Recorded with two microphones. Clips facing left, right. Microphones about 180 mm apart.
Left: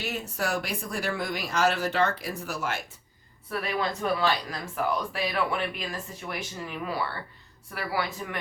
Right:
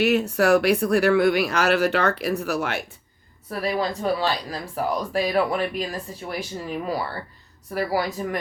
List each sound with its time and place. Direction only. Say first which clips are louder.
0.0 s speech: right 12 dB; 70° right (ahead or behind)
3.5 s speech: right 5 dB; 35° right (ahead or behind)